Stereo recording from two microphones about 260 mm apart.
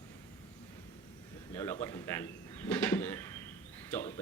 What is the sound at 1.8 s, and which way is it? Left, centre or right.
Speech, centre.